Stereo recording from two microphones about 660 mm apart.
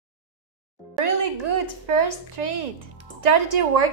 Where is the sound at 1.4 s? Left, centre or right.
Right.